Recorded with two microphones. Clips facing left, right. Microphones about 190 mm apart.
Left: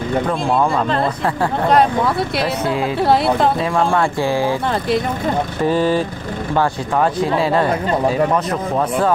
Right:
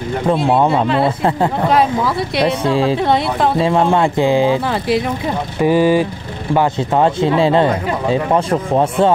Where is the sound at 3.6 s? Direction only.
20° right (ahead or behind).